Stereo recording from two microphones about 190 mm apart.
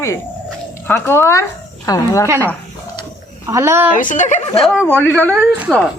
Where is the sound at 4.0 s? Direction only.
40° left (ahead or behind).